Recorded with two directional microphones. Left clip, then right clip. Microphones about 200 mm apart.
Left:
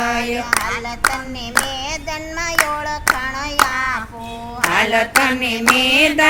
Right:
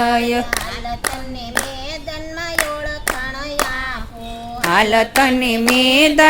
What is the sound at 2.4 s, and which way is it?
Clapping, 25° left (ahead or behind).